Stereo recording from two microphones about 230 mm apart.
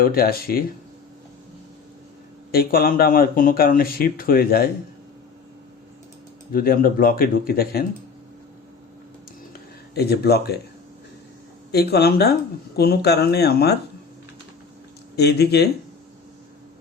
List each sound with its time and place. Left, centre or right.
0.0 s speech: left
2.5 s speech: left
6.5 s speech: left
9.5 s a sound: left
11.7 s speech: left
15.1 s speech: left